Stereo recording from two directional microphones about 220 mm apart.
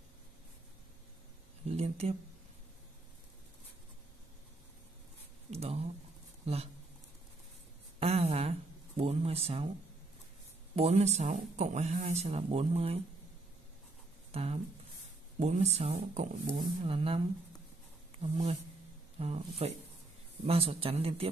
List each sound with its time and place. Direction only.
1.7 s speech: 30° right (ahead or behind)
5.5 s speech: 25° right (ahead or behind)
8.0 s a sound: 30° right (ahead or behind)
10.8 s speech: 30° right (ahead or behind)
14.3 s speech: 25° right (ahead or behind)
18.2 s speech: 25° right (ahead or behind)